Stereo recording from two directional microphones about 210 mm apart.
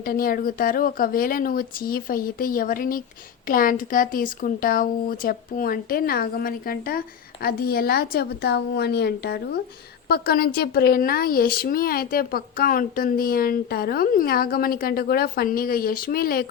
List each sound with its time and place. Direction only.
0.0 s speech: 45° left (ahead or behind)